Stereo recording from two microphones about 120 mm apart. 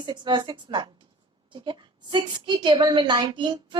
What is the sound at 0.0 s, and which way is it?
Speech, 40° right (ahead or behind).